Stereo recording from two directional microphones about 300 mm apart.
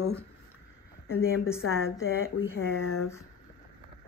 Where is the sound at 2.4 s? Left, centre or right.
Left.